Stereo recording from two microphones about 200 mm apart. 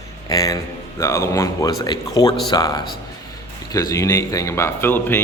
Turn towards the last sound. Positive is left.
turn(degrees=10)  # may be behind; listen again after turning